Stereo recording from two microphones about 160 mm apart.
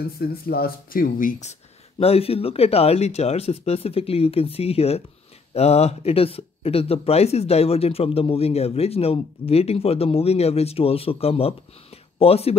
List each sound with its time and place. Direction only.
0.2 s speech: 75° left (ahead or behind); by 12.5 s 40° left (ahead or behind)